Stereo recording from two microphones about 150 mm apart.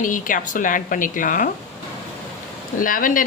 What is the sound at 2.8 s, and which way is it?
Speech, 65° left (ahead or behind).